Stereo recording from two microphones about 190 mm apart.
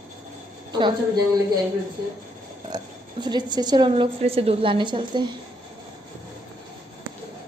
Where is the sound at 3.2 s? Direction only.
20° right (ahead or behind).